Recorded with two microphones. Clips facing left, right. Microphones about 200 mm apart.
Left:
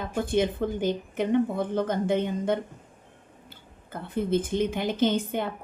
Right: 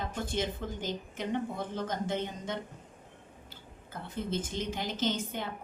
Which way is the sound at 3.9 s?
55° left (ahead or behind).